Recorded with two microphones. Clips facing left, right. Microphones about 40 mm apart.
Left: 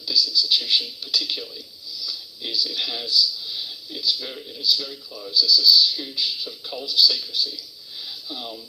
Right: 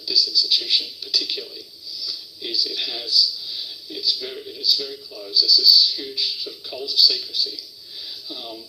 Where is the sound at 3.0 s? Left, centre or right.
Left.